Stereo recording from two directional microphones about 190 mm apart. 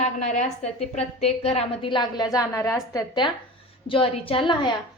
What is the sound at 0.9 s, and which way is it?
A woman's voice, 35° left (ahead or behind).